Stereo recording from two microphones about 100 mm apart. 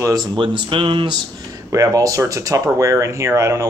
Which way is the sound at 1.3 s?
35° right (ahead or behind).